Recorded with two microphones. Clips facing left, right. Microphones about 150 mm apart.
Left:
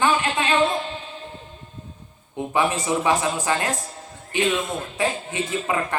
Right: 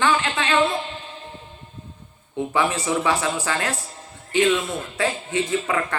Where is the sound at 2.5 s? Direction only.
20° left (ahead or behind).